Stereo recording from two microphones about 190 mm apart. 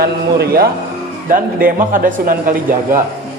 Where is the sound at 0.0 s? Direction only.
55° right (ahead or behind).